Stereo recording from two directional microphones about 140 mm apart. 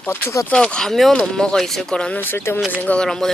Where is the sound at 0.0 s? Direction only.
20° left (ahead or behind).